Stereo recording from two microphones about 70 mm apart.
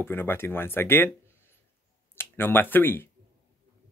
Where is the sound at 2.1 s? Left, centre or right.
Left.